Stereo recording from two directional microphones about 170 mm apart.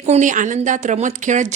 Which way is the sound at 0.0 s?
45° right (ahead or behind).